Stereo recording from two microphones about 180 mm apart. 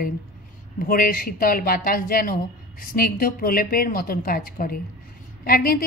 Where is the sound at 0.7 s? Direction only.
55° left (ahead or behind).